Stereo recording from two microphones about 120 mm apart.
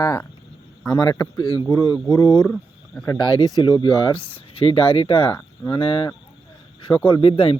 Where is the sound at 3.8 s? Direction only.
35° left (ahead or behind).